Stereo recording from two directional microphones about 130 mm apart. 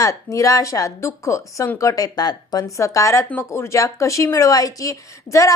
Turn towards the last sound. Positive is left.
turn(degrees=25)  # may be behind; listen again after turning